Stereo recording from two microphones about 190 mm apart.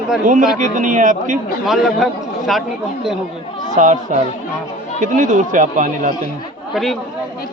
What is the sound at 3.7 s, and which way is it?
Speech, 40° right (ahead or behind).